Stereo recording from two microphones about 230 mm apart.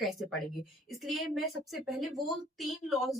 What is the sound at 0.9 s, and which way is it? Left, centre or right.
A woman's voice, centre.